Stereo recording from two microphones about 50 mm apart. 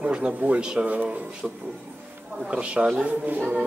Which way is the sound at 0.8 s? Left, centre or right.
Right.